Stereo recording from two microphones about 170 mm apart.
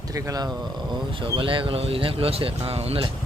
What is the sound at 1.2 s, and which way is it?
Speech, 30° right (ahead or behind).